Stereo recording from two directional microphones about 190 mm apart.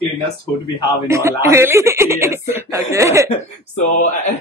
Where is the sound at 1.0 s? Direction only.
15° right (ahead or behind).